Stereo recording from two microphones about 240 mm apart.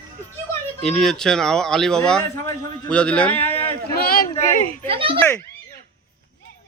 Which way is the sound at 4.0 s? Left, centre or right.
Left.